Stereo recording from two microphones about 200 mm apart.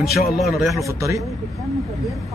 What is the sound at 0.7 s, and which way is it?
Speech, 15° right (ahead or behind).